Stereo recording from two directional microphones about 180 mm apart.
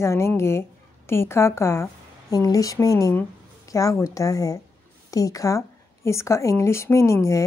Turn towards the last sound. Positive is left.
turn(degrees=15)  # may be behind; listen again after turning